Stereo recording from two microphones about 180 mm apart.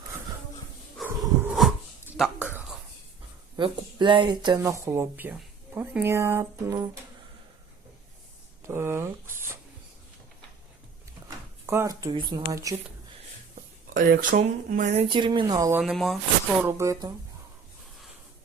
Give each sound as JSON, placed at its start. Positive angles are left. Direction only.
{"t": 1.0, "sound": "a sound", "side_deg": -5}
{"t": 3.6, "sound": "speech", "side_deg": -25}
{"t": 8.6, "sound": "speech", "side_deg": -15}
{"t": 11.6, "sound": "speech", "side_deg": -15}
{"t": 13.9, "sound": "speech", "side_deg": -50}
{"t": 15.0, "sound": "speech", "side_deg": -25}
{"t": 15.8, "sound": "speech", "side_deg": 0}
{"t": 16.6, "sound": "speech", "side_deg": -15}